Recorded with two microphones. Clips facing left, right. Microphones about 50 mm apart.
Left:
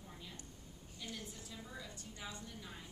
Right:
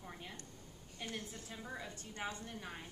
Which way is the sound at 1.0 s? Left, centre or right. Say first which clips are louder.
Right 3 dB; right.